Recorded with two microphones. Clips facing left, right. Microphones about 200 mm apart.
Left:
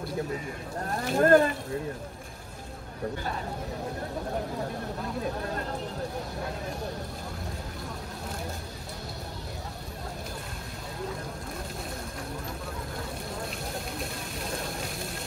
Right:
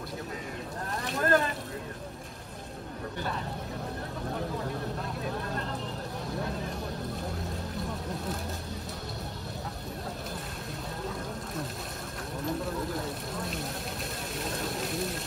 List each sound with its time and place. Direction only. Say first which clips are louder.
1.1 s speech: left 7 dB; 45° left (ahead or behind)
14.4 s vehicle: right 1 dB; centre (ahead or behind)